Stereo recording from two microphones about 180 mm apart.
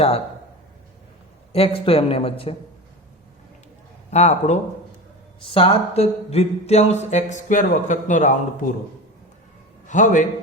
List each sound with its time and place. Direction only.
1.5 s speech: 30° left (ahead or behind)
4.1 s speech: 40° left (ahead or behind)
9.8 s a man's voice: 45° left (ahead or behind)